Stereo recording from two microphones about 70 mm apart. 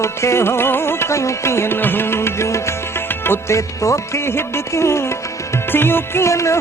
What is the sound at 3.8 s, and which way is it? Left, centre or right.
Music, left.